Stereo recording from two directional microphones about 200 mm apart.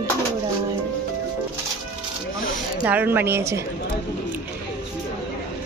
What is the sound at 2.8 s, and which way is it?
Speech, 10° right (ahead or behind).